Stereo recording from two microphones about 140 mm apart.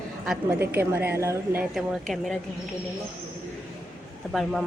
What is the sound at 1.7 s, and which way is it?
Speech, centre (ahead or behind).